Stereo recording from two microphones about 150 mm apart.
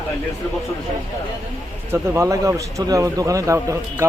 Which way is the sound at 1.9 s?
20° right (ahead or behind).